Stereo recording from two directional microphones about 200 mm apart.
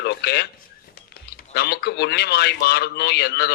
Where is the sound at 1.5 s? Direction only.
55° left (ahead or behind).